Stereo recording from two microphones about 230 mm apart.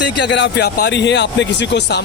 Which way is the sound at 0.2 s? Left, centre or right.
Left.